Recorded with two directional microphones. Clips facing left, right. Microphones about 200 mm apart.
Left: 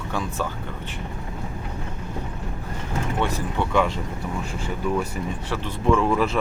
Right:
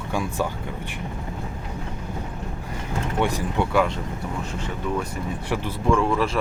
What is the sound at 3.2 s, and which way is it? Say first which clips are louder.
Speech: right 4 dB; 15° right (ahead or behind).